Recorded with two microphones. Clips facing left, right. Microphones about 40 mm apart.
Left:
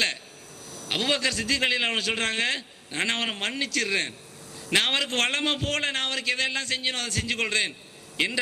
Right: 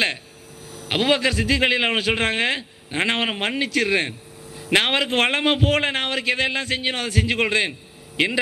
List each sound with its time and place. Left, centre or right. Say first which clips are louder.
0.7 s a man's voice: right 6 dB; right